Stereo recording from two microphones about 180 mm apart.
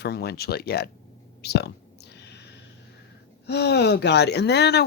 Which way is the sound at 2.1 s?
70° left (ahead or behind).